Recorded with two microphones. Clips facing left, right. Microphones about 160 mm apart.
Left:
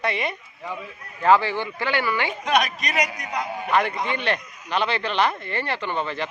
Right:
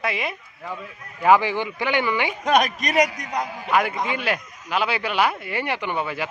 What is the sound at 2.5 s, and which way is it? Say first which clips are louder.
Speech: right 3 dB; 45° right (ahead or behind).